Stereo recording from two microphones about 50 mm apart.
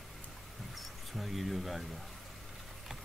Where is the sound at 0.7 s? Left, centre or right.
Centre.